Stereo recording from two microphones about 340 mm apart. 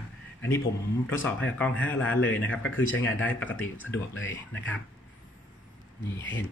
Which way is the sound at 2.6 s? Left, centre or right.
Left.